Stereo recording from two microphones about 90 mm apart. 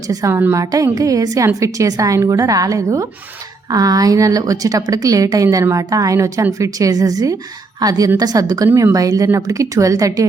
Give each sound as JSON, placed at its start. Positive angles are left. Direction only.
{"t": 0.1, "sound": "a woman's voice", "side_deg": -40}